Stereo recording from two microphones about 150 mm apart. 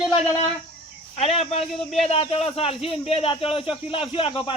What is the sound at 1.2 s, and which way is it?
Speech, 40° left (ahead or behind).